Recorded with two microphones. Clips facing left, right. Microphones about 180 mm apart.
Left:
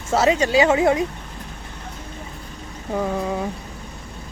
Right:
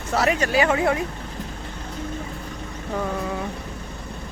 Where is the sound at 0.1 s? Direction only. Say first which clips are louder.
Left 4 dB; 20° left (ahead or behind).